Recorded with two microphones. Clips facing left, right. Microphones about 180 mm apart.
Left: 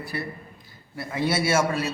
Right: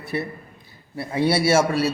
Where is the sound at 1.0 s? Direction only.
30° right (ahead or behind).